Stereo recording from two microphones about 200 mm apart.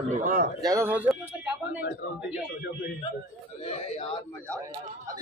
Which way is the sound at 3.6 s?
30° left (ahead or behind).